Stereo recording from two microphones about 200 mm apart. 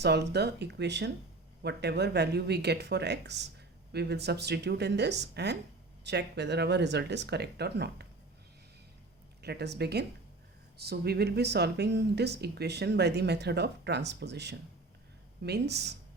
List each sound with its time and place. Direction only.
0.0 s speech: 55° right (ahead or behind)
9.4 s speech: 55° right (ahead or behind)